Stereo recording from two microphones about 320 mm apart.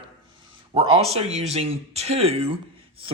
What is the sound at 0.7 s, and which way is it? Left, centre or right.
Speech, centre.